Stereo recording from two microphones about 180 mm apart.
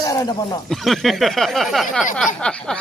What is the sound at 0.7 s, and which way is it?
A man's voice, centre (ahead or behind).